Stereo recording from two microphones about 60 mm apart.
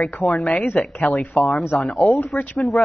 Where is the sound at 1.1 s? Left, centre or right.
Left.